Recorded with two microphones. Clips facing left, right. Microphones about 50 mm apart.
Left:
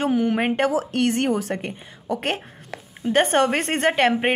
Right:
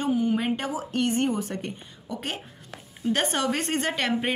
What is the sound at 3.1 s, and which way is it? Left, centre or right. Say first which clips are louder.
A woman's voice: left 7 dB; left.